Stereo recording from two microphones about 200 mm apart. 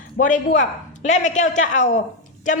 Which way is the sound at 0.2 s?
40° left (ahead or behind).